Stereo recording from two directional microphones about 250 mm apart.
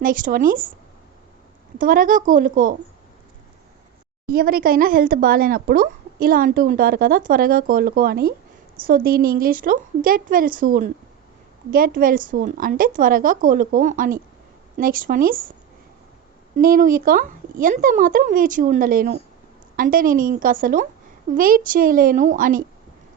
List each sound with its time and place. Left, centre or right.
0.0 s speech: right
1.8 s speech: right
4.3 s speech: right
16.6 s speech: right